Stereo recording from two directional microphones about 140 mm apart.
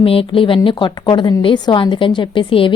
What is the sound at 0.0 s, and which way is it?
A woman's voice, 40° left (ahead or behind).